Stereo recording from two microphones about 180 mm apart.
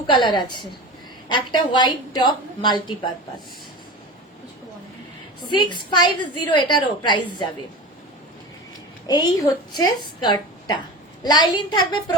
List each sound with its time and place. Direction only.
0.1 s a woman's voice: 25° left (ahead or behind)
5.5 s a woman's voice: 25° left (ahead or behind)
9.0 s a woman's voice: 20° left (ahead or behind)